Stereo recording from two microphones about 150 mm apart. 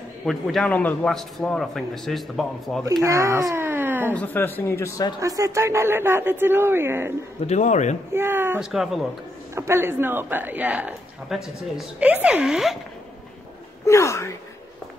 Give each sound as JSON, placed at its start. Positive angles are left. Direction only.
{"t": 0.2, "sound": "a man's voice", "side_deg": 0}
{"t": 3.0, "sound": "speech", "side_deg": -20}
{"t": 4.1, "sound": "speech", "side_deg": 10}
{"t": 5.2, "sound": "speech", "side_deg": -20}
{"t": 7.4, "sound": "speech", "side_deg": 50}
{"t": 8.1, "sound": "speech", "side_deg": -15}
{"t": 13.8, "sound": "speech", "side_deg": 20}